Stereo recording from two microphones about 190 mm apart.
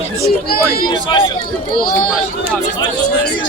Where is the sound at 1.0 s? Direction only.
25° left (ahead or behind).